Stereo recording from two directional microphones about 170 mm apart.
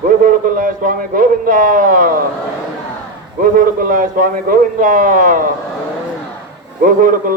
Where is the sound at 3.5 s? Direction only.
55° right (ahead or behind).